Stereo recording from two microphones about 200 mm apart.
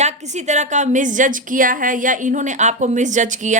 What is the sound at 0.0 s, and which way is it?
A woman's voice, 35° right (ahead or behind).